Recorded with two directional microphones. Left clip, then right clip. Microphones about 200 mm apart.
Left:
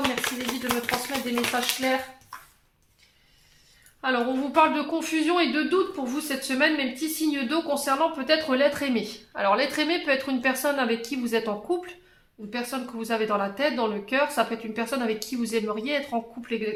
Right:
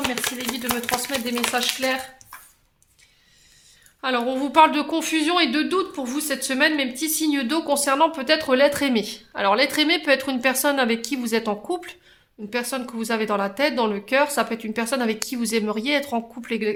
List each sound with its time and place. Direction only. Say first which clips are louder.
0.0 s chopping: right 1 dB; 35° right (ahead or behind)
1.8 s a woman's voice: even; 40° right (ahead or behind)
4.0 s a woman's voice: right 2 dB; 40° right (ahead or behind)